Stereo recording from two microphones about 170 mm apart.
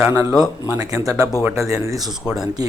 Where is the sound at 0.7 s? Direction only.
20° right (ahead or behind).